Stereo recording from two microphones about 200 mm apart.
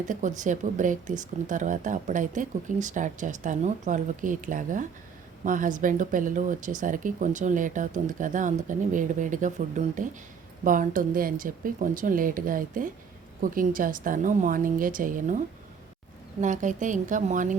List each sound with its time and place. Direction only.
0.1 s speech: 40° right (ahead or behind)
16.4 s speech: 40° right (ahead or behind)